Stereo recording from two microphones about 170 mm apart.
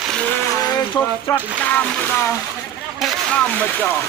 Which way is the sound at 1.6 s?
10° left (ahead or behind).